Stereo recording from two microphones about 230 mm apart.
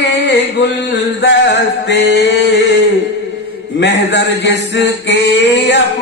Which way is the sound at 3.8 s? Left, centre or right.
Left.